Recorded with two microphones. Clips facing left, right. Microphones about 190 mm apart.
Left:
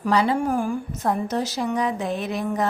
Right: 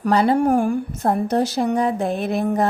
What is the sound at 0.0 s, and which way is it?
Speech, 50° right (ahead or behind).